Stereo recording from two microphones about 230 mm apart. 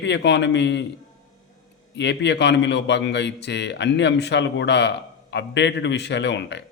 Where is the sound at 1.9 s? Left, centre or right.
Left.